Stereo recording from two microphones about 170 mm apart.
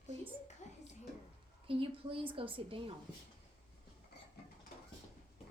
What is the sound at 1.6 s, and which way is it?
A woman's voice, 30° right (ahead or behind).